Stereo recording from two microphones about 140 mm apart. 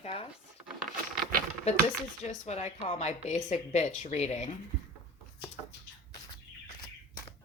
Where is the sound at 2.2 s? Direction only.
50° left (ahead or behind).